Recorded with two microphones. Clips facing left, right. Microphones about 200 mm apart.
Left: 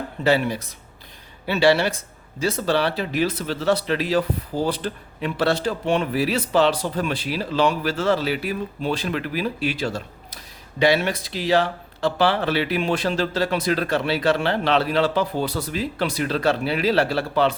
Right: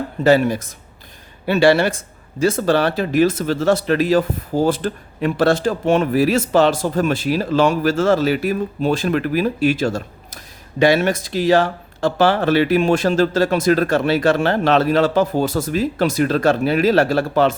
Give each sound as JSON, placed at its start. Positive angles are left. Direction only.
{"t": 0.3, "sound": "speech", "side_deg": -45}